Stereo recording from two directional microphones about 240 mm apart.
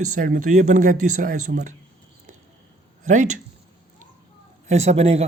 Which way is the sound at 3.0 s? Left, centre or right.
Right.